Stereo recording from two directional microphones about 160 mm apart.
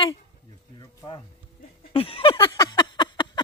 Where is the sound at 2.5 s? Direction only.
25° left (ahead or behind).